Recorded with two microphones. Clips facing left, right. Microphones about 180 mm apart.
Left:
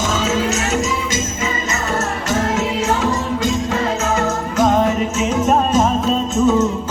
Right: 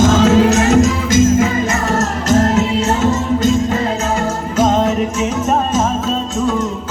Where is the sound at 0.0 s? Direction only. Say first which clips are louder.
Right 8 dB; 55° right (ahead or behind).